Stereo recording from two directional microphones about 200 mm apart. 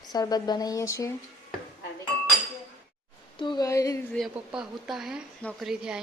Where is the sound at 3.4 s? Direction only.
20° left (ahead or behind).